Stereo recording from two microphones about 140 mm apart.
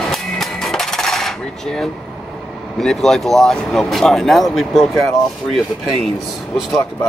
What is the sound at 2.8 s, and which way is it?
Speech, 5° left (ahead or behind).